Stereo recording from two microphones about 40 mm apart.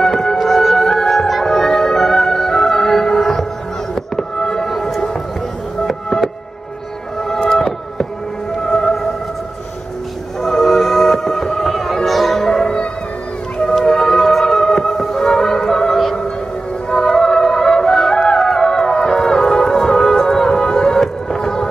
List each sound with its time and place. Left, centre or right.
0.0 s music: centre
7.4 s fireworks: centre
8.6 s music: centre
10.4 s music: centre
12.4 s music: centre
13.8 s music: centre
15.9 s music: centre
21.4 s a sound: centre